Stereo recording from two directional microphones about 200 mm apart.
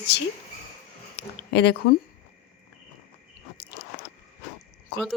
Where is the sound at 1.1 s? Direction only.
60° left (ahead or behind).